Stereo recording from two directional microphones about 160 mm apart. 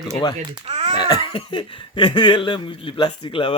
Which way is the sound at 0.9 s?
25° left (ahead or behind).